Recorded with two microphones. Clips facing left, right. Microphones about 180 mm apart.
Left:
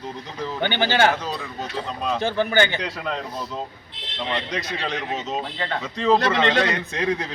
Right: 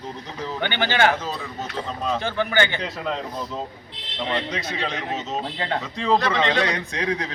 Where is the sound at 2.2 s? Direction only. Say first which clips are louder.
Left 4 dB; 10° left (ahead or behind).